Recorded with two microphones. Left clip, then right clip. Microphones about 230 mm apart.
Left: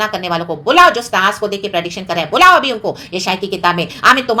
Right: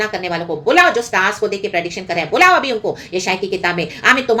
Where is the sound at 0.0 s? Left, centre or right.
Left.